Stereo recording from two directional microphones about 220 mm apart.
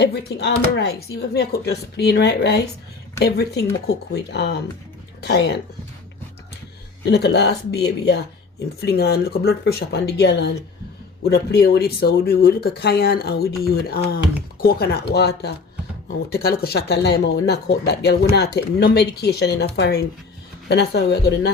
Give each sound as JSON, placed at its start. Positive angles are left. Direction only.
{"t": 0.0, "sound": "speech", "side_deg": 50}
{"t": 7.0, "sound": "speech", "side_deg": 50}